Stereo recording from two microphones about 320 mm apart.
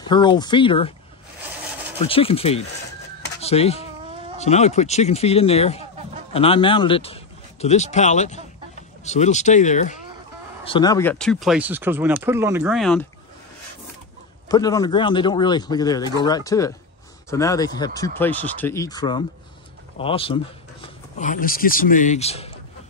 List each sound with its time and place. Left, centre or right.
0.0 s speech: centre
2.0 s speech: centre
14.5 s speech: centre